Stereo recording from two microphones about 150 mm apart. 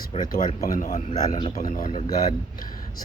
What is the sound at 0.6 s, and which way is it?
Speech, 50° left (ahead or behind).